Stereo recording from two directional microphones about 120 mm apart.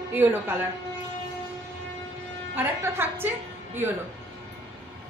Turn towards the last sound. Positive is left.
turn(degrees=-20)  # may be behind; listen again after turning